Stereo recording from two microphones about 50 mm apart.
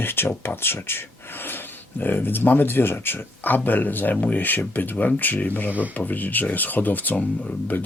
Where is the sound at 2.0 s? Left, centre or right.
Left.